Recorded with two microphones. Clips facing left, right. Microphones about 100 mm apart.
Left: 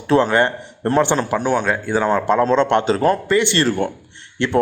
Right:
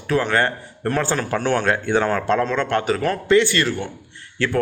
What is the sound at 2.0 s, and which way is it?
Speech, 20° left (ahead or behind).